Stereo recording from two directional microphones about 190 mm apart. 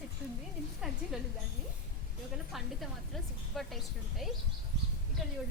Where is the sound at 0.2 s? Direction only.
5° right (ahead or behind).